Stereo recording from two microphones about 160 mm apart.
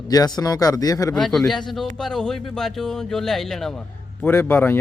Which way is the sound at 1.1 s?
Centre (ahead or behind).